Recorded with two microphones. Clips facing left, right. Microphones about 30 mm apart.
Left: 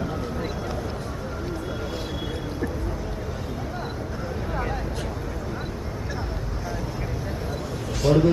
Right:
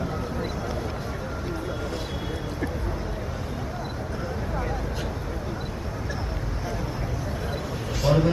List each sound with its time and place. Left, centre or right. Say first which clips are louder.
8.0 s vehicle: left 3 dB; centre